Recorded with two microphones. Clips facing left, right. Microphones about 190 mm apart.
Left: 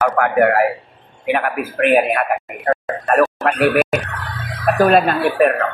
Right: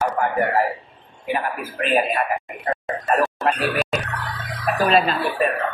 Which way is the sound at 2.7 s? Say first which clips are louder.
Left 7 dB; 60° left (ahead or behind).